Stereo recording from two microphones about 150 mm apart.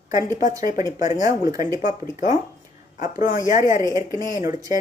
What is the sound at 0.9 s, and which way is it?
Speech, 55° left (ahead or behind).